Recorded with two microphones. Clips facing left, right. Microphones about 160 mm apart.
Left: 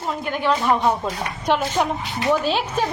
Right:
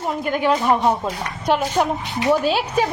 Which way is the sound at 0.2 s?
45° right (ahead or behind).